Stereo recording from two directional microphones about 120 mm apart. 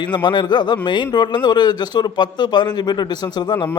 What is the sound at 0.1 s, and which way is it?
A man's voice, 40° left (ahead or behind).